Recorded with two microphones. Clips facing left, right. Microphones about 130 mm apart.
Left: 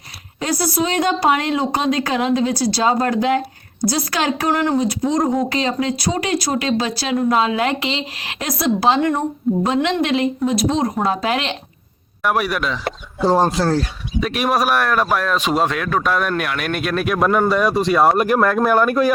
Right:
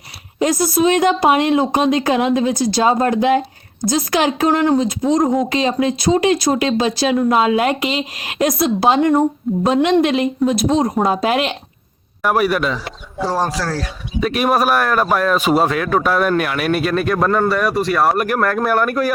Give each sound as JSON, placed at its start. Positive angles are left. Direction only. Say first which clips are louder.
{"t": 0.3, "sound": "a woman's voice", "louder": "right 4 dB", "side_deg": -15}
{"t": 5.2, "sound": "speech", "louder": "right 2 dB", "side_deg": 0}
{"t": 5.5, "sound": "a woman's voice", "louder": "right 3 dB", "side_deg": -20}
{"t": 9.5, "sound": "speech", "louder": "left 2 dB", "side_deg": 0}
{"t": 10.1, "sound": "a woman's voice", "louder": "right 2 dB", "side_deg": -20}
{"t": 12.2, "sound": "speech", "louder": "right 3 dB", "side_deg": 0}
{"t": 13.2, "sound": "speech", "louder": "left 4 dB", "side_deg": 25}
{"t": 14.2, "sound": "speech", "louder": "right 2 dB", "side_deg": 0}